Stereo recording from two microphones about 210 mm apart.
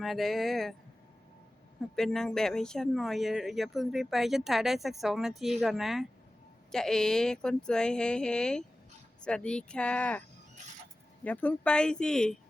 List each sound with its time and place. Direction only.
0.0 s speech: centre (ahead or behind)
2.0 s speech: centre (ahead or behind)